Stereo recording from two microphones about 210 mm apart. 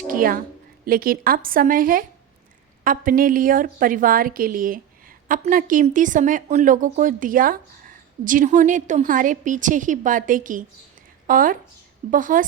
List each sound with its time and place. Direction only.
0.1 s a woman's voice: 40° right (ahead or behind)